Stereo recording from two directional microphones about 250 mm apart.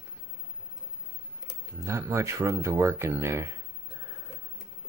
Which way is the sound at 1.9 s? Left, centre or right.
Centre.